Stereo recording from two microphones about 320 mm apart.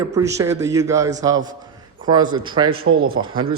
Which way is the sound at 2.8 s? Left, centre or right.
Right.